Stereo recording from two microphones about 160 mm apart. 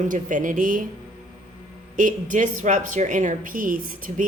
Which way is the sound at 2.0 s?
55° right (ahead or behind).